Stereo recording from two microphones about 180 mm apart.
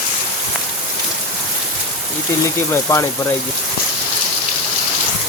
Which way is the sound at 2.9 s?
15° left (ahead or behind).